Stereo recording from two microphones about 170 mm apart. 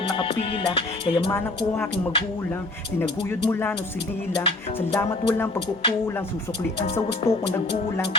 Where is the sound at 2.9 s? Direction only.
10° left (ahead or behind).